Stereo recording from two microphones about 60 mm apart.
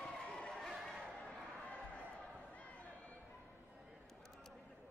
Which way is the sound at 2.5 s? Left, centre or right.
Left.